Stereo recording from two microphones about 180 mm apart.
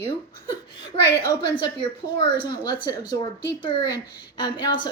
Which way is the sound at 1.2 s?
20° left (ahead or behind).